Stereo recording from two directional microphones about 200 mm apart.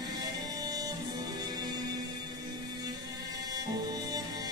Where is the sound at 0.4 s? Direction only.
20° right (ahead or behind).